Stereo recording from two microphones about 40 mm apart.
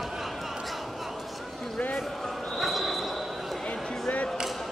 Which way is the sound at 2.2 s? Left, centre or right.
Centre.